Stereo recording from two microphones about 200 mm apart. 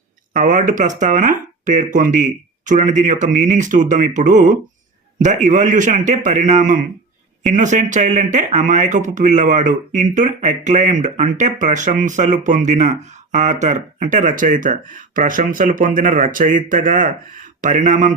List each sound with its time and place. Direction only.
0.3 s speech: 40° right (ahead or behind)